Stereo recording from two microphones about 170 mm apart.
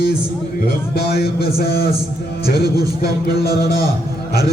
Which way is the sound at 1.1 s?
65° left (ahead or behind).